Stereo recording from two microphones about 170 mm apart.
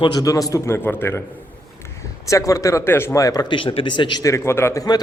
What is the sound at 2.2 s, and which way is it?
Speech, 20° left (ahead or behind).